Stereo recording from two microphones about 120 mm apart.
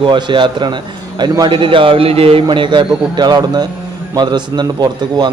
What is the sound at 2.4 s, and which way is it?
A man's voice, 40° right (ahead or behind).